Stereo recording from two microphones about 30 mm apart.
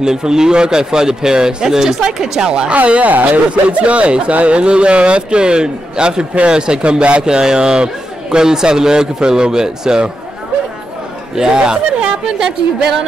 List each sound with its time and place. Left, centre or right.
0.0 s a man's voice: right
2.4 s a man's voice: right
2.7 s speech: right
3.4 s a man's voice: right
11.5 s a man's voice: right